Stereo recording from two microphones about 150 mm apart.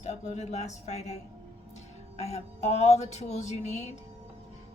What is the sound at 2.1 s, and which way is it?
A woman's voice, 50° left (ahead or behind).